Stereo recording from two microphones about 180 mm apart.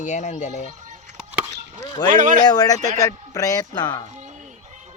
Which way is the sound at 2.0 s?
45° right (ahead or behind).